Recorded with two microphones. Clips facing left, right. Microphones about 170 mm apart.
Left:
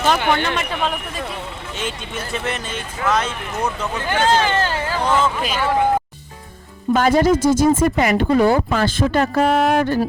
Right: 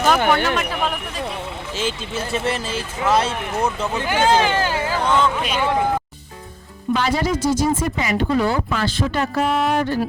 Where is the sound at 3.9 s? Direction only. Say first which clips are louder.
Even; 10° right (ahead or behind).